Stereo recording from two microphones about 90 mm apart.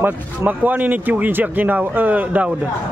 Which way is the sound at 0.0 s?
20° right (ahead or behind).